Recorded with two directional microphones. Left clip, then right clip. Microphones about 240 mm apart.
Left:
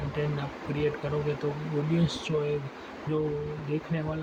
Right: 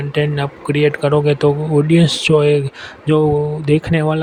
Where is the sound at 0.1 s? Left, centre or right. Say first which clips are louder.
Right 15 dB; right.